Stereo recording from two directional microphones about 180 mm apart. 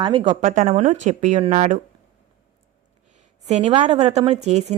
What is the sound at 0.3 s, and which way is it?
A woman's voice, 45° right (ahead or behind).